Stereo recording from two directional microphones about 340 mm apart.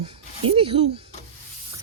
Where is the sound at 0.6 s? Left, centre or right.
Centre.